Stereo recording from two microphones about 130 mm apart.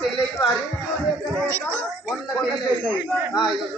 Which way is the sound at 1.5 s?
20° right (ahead or behind).